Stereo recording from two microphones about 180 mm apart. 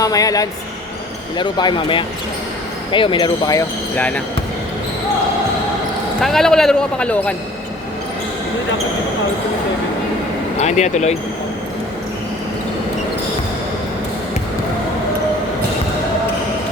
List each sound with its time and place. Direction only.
0.0 s speech: 20° left (ahead or behind)
3.9 s speech: 5° left (ahead or behind)
6.1 s a man's voice: centre (ahead or behind)
10.6 s speech: 40° left (ahead or behind)